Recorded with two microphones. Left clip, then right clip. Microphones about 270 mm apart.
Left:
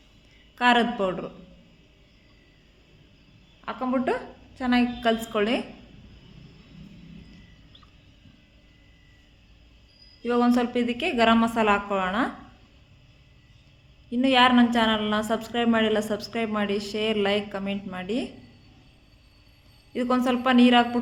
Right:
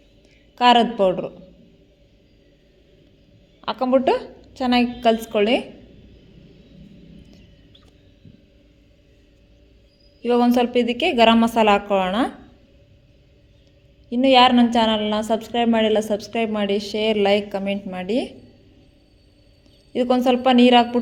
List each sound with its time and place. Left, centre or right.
0.5 s a woman's voice: centre
3.7 s a woman's voice: right
10.2 s a woman's voice: centre
14.1 s a woman's voice: centre
19.9 s a woman's voice: centre